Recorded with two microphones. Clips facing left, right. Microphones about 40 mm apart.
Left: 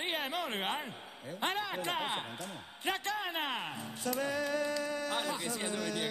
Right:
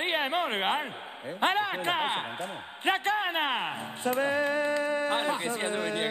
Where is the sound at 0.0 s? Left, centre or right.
Right.